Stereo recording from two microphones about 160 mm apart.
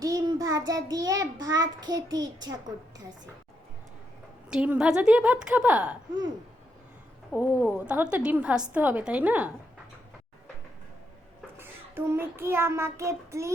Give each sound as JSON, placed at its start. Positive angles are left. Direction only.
{"t": 0.0, "sound": "child singing", "side_deg": -20}
{"t": 4.4, "sound": "a woman's voice", "side_deg": -5}
{"t": 7.3, "sound": "a woman's voice", "side_deg": -10}
{"t": 11.5, "sound": "child singing", "side_deg": -15}